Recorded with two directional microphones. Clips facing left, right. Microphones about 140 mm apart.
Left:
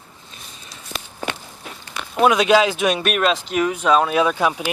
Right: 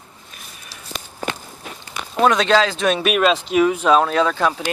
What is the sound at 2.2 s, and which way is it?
Speech, 10° left (ahead or behind).